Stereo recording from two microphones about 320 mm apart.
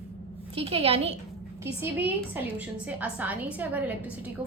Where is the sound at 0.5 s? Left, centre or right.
Centre.